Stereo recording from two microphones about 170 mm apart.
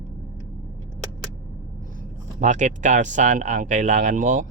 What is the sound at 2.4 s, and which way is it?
Speech, 45° right (ahead or behind).